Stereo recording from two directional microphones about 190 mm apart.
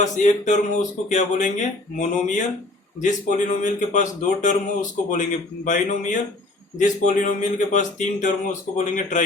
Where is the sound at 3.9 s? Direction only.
40° left (ahead or behind).